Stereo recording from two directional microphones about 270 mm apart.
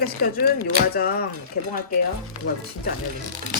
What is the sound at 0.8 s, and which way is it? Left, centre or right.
Speech, left.